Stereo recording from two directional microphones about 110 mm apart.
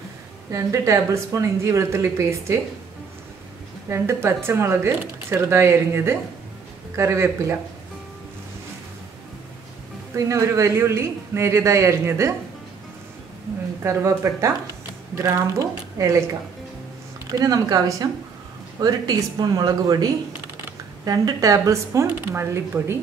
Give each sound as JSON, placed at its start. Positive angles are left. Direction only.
{"t": 0.5, "sound": "speech", "side_deg": -30}
{"t": 3.9, "sound": "speech", "side_deg": -25}
{"t": 10.1, "sound": "speech", "side_deg": -30}
{"t": 13.8, "sound": "speech", "side_deg": -25}
{"t": 17.3, "sound": "speech", "side_deg": -35}